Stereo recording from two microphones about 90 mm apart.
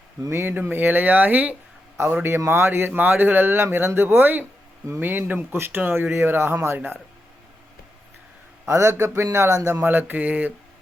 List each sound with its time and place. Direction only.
0.3 s speech: 25° right (ahead or behind)
8.6 s a man's voice: 30° right (ahead or behind)
9.8 s speech: 20° right (ahead or behind)